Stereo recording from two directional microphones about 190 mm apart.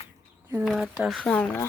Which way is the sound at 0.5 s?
Centre (ahead or behind).